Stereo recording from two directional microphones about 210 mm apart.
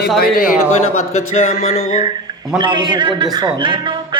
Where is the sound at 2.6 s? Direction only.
20° right (ahead or behind).